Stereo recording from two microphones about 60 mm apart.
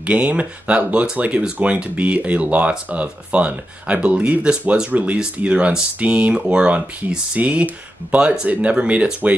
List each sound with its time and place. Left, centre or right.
0.0 s speech: right
7.3 s speech: right